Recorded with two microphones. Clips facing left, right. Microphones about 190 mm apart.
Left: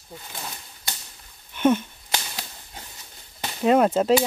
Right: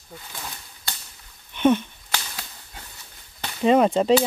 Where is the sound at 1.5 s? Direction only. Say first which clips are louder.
Right 1 dB; 5° left (ahead or behind).